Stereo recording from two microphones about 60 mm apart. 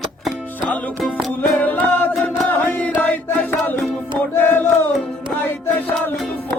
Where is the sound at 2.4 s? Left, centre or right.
Left.